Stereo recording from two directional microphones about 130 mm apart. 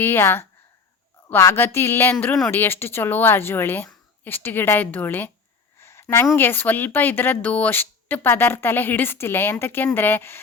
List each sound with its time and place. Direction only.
0.0 s a woman's voice: 15° left (ahead or behind)
5.8 s a sound: 20° left (ahead or behind)
6.3 s speech: 15° left (ahead or behind)